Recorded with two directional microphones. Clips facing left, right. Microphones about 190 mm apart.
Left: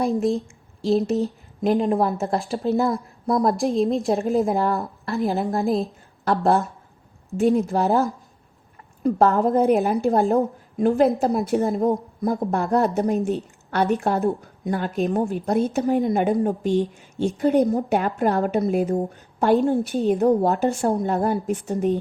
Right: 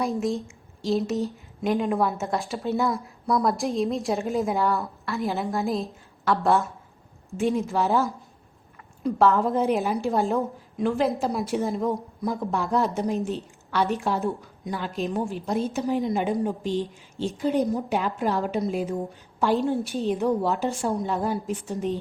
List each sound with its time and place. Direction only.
0.0 s a woman's voice: 35° left (ahead or behind)
4.0 s a woman's voice: 35° left (ahead or behind)
9.0 s a woman's voice: 40° left (ahead or behind)